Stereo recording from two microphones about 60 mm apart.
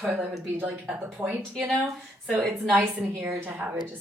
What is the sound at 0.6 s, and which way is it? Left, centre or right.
Speech, right.